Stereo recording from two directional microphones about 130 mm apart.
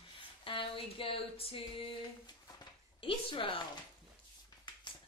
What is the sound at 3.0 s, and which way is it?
Speech, 40° left (ahead or behind).